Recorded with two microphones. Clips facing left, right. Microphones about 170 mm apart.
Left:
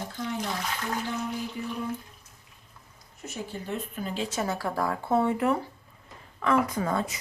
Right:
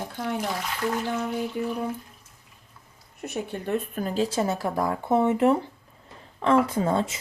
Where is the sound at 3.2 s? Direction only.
60° right (ahead or behind).